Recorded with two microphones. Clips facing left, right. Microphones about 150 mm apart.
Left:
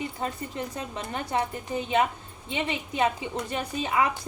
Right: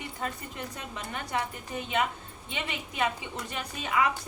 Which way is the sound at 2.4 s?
30° left (ahead or behind).